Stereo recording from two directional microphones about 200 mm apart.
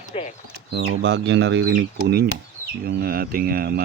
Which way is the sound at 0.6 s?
60° right (ahead or behind).